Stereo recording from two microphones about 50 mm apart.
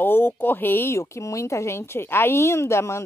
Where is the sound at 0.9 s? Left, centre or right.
Left.